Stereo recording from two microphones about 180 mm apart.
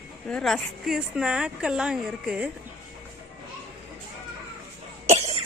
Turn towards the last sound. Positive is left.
turn(degrees=-40)  # may be behind; listen again after turning